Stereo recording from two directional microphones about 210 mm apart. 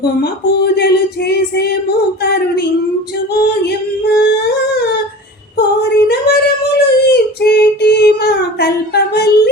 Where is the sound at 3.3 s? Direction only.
50° left (ahead or behind).